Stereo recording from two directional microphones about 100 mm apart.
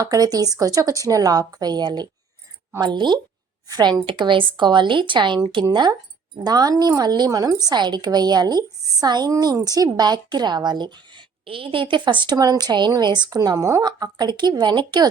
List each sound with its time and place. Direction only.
0.0 s a woman's voice: 40° right (ahead or behind)